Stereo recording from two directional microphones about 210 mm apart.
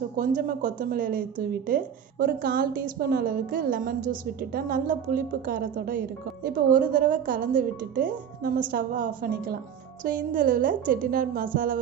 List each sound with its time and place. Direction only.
0.2 s a woman's voice: 40° right (ahead or behind)